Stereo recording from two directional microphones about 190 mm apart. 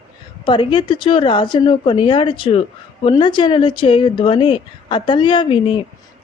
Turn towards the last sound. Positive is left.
turn(degrees=25)  # may be behind; listen again after turning